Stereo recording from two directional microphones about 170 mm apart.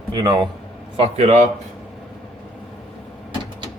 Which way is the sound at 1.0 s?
35° right (ahead or behind).